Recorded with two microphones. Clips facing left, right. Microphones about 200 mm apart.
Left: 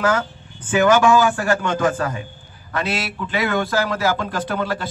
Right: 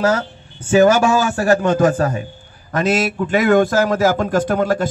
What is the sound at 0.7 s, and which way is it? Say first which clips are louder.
A man's voice: right 3 dB; 40° right (ahead or behind).